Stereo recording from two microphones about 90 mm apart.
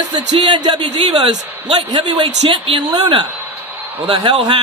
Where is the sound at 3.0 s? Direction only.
65° right (ahead or behind).